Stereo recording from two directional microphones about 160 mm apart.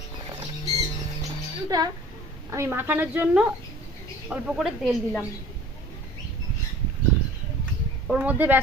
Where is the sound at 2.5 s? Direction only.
15° right (ahead or behind); by 5.2 s centre (ahead or behind).